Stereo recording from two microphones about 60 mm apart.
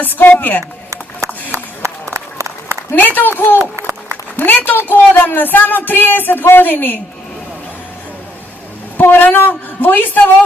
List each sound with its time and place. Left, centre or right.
0.0 s speech: left
1.2 s a sound: right
3.2 s speech: left
3.8 s a sound: right
4.4 s speech: left
9.0 s speech: left